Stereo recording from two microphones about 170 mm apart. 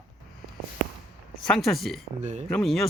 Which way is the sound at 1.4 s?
Centre (ahead or behind).